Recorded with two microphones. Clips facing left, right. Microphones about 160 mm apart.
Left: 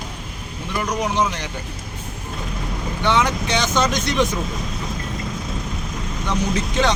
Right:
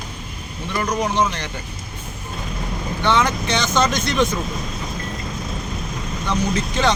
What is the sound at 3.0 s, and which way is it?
Speech, 15° left (ahead or behind).